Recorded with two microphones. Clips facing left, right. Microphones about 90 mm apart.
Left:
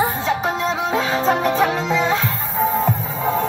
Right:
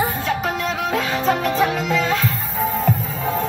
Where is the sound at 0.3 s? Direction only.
25° left (ahead or behind).